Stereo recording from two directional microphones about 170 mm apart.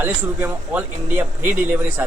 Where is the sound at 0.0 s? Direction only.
10° right (ahead or behind).